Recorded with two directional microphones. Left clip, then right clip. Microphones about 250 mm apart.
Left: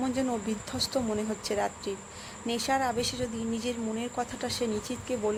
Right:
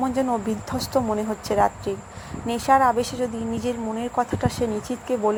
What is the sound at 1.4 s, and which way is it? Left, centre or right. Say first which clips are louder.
Speech: right 11 dB; centre.